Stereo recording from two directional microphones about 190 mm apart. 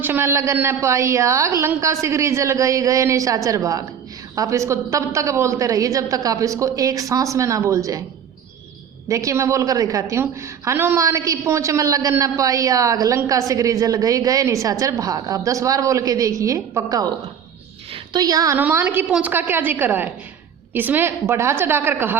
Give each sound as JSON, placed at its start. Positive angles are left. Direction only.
{"t": 0.0, "sound": "a woman's voice", "side_deg": -10}
{"t": 9.0, "sound": "a woman's voice", "side_deg": -15}